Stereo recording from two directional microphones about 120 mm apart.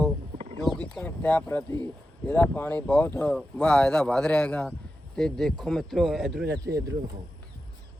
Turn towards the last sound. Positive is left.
turn(degrees=-30)  # may be behind; listen again after turning